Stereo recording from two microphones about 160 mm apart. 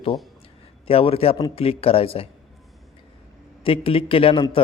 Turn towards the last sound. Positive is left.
turn(degrees=30)  # may be behind; listen again after turning